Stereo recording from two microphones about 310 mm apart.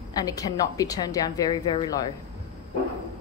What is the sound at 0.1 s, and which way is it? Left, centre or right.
A woman's voice, centre.